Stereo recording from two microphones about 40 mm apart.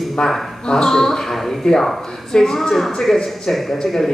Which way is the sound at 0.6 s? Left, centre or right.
Centre.